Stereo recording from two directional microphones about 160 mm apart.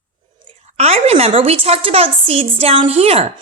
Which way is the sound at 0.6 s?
40° right (ahead or behind).